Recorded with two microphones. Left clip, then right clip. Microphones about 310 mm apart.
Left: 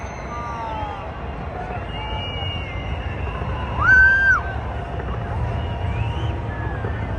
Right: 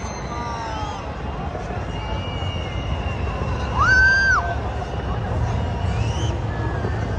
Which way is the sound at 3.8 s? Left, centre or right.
Centre.